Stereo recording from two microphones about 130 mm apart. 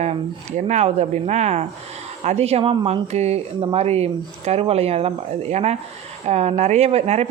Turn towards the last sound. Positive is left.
turn(degrees=-55)  # may be behind; listen again after turning